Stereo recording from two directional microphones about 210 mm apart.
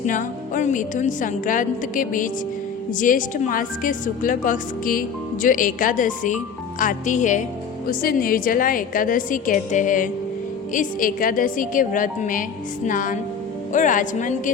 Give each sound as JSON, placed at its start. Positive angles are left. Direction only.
{"t": 0.0, "sound": "a woman's voice", "side_deg": 40}